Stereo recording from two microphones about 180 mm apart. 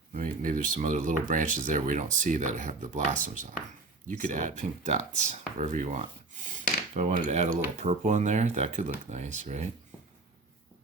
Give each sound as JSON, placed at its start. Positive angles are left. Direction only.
{"t": 0.1, "sound": "speech", "side_deg": -50}